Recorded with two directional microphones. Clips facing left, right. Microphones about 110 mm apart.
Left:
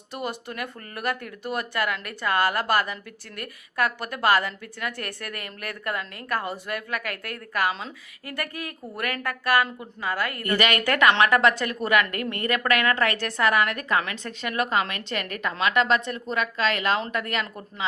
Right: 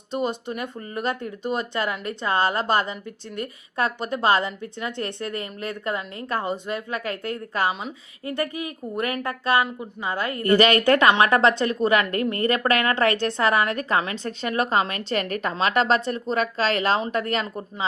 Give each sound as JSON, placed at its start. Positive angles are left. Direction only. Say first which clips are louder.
{"t": 0.1, "sound": "a woman's voice", "louder": "right 6 dB", "side_deg": -20}